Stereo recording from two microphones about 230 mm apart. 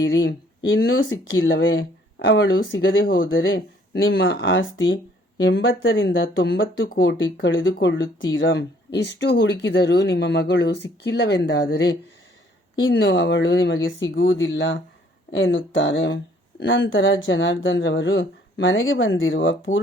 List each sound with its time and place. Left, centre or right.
0.1 s speech: left